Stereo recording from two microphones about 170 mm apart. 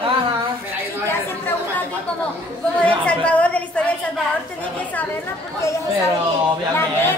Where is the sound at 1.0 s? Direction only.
10° left (ahead or behind).